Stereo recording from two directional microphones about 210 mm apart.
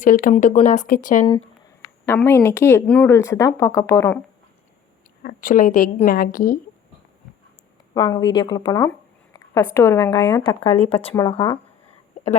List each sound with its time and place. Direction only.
0.0 s a woman's voice: 40° left (ahead or behind)
2.0 s speech: 10° left (ahead or behind)
5.2 s a woman's voice: 40° left (ahead or behind)
7.9 s speech: 20° left (ahead or behind)